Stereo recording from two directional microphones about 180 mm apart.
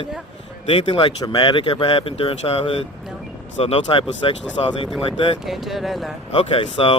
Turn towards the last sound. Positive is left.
turn(degrees=30)  # may be behind; listen again after turning